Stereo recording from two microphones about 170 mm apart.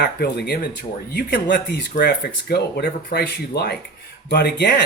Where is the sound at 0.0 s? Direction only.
70° left (ahead or behind).